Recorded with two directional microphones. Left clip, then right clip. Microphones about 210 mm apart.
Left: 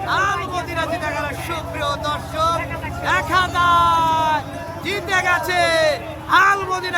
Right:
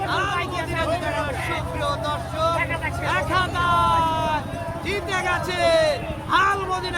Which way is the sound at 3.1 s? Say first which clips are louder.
Left 5 dB; 35° left (ahead or behind).